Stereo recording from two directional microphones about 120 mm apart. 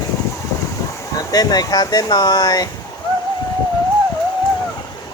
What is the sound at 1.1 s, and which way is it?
Speech, 30° left (ahead or behind).